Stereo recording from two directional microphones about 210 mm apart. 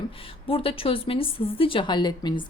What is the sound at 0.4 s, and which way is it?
A woman's voice, 25° left (ahead or behind).